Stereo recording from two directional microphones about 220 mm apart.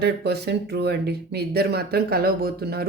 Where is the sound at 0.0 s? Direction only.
50° right (ahead or behind).